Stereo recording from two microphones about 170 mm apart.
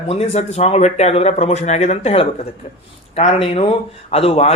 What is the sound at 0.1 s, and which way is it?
A man's voice, 35° left (ahead or behind).